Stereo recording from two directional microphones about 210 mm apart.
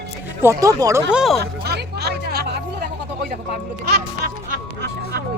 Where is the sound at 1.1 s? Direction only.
Centre (ahead or behind).